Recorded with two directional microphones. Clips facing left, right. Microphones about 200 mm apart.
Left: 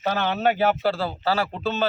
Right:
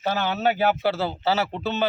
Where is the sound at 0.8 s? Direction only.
20° right (ahead or behind).